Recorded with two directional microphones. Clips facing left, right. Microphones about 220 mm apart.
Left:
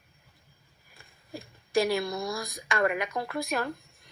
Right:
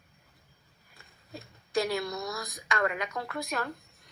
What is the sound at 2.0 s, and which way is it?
Speech, 30° left (ahead or behind).